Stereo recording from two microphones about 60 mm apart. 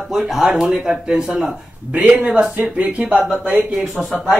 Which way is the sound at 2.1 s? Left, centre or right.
Right.